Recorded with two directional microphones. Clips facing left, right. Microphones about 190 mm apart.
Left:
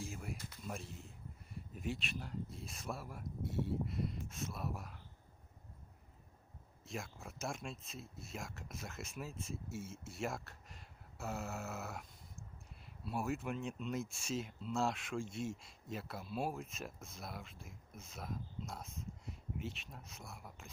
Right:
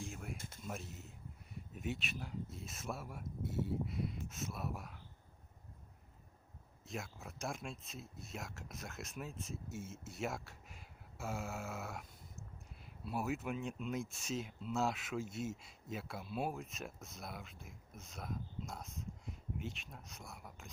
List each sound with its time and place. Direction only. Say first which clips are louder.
0.0 s a sound: left 1 dB; centre (ahead or behind)
0.3 s speech: even; 50° right (ahead or behind)
0.6 s speech: even; centre (ahead or behind)
6.8 s speech: even; centre (ahead or behind)